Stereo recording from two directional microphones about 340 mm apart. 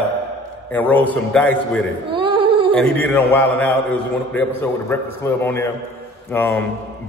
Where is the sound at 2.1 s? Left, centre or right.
Centre.